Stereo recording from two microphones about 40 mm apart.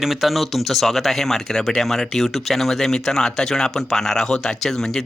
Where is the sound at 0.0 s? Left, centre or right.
Centre.